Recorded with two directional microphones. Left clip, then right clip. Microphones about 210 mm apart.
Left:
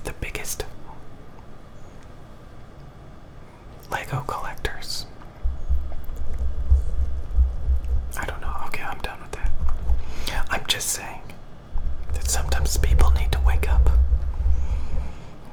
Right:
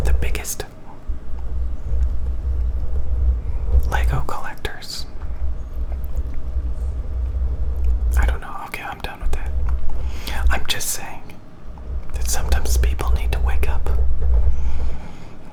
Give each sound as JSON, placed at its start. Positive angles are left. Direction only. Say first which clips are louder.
{"t": 0.0, "sound": "whispering", "louder": "right 3 dB", "side_deg": -5}
{"t": 3.8, "sound": "whispering", "louder": "right 3 dB", "side_deg": -5}
{"t": 8.1, "sound": "whispering", "louder": "right 2 dB", "side_deg": -5}